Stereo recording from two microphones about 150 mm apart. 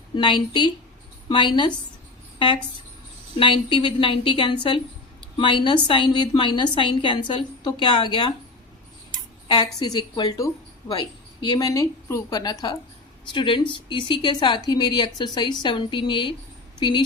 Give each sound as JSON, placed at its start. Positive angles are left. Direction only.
{"t": 0.2, "sound": "speech", "side_deg": 30}
{"t": 3.3, "sound": "speech", "side_deg": 35}
{"t": 9.8, "sound": "a woman's voice", "side_deg": 30}